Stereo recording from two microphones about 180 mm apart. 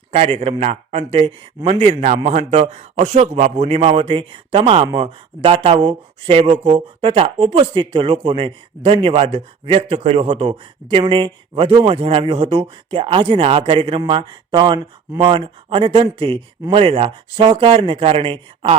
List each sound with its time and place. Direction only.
0.1 s a man's voice: 35° right (ahead or behind)